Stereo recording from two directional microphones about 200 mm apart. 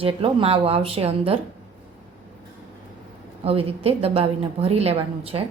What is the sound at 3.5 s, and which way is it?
A woman's voice, 30° right (ahead or behind).